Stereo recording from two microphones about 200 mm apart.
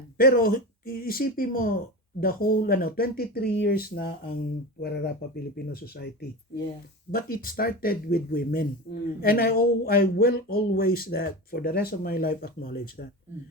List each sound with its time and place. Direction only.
0.2 s speech: 45° left (ahead or behind)